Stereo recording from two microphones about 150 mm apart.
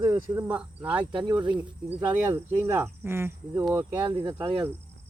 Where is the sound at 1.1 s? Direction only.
30° right (ahead or behind).